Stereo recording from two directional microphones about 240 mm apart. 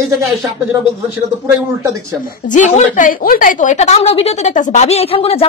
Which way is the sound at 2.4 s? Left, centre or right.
Left.